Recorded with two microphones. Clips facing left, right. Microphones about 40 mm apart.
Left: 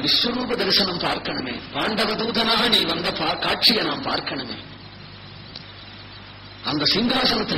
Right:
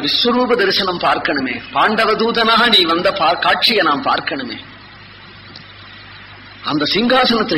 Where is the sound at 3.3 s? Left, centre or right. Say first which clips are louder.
Right 7 dB; right.